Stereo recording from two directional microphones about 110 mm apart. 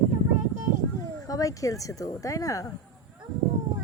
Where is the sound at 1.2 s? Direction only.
30° left (ahead or behind).